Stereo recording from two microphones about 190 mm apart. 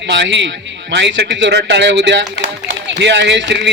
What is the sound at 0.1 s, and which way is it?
Speech, 70° right (ahead or behind).